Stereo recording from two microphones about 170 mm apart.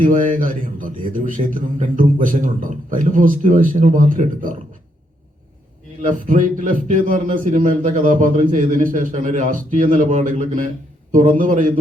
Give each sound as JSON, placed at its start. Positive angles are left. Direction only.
{"t": 0.0, "sound": "a man's voice", "side_deg": -50}
{"t": 6.0, "sound": "a man's voice", "side_deg": -50}